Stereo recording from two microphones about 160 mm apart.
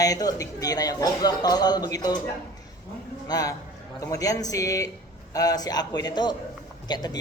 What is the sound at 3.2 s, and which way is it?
Speech, 25° left (ahead or behind).